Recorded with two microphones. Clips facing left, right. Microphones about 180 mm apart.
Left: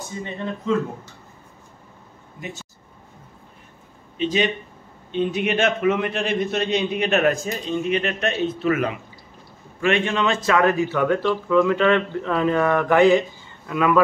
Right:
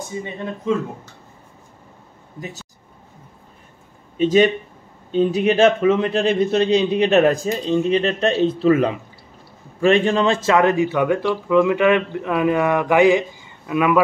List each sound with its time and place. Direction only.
0.1 s speech: 10° right (ahead or behind)
4.2 s a man's voice: 45° right (ahead or behind); by 13.9 s 15° right (ahead or behind)